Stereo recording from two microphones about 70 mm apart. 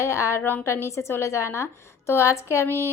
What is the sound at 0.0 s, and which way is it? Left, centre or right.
Speech, left.